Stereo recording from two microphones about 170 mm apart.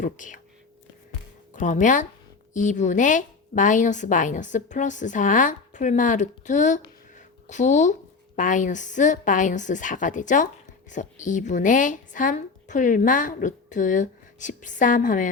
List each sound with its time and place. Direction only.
0.0 s a woman's voice: 50° left (ahead or behind)
1.5 s a woman's voice: 45° left (ahead or behind)
7.2 s a sound: 45° left (ahead or behind)
8.4 s a woman's voice: 50° left (ahead or behind)